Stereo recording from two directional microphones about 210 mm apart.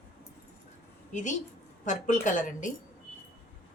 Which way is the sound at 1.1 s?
35° left (ahead or behind).